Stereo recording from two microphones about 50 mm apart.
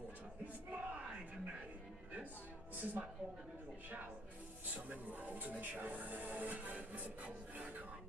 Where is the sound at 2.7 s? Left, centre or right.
Right.